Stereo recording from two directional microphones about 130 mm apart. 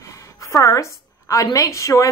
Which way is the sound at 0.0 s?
25° left (ahead or behind).